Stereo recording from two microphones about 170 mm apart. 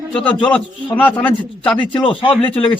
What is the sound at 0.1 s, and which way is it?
A man's voice, 10° left (ahead or behind).